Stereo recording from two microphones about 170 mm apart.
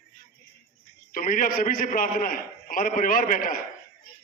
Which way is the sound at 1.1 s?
55° left (ahead or behind).